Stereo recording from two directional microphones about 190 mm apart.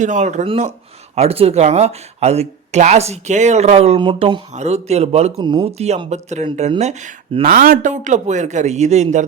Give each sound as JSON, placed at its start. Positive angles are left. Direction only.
{"t": 0.0, "sound": "speech", "side_deg": -40}